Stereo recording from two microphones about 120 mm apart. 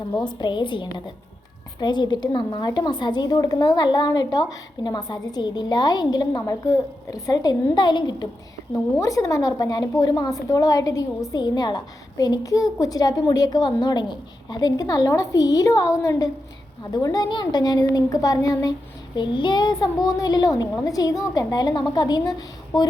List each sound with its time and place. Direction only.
0.3 s a woman's voice: 40° left (ahead or behind)
9.0 s a woman's voice: 25° left (ahead or behind)
19.1 s a woman's voice: 40° left (ahead or behind)